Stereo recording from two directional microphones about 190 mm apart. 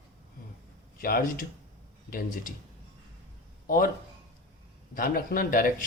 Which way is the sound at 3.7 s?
45° left (ahead or behind).